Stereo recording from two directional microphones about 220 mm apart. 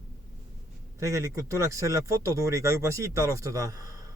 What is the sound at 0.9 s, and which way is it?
Speech, 15° right (ahead or behind).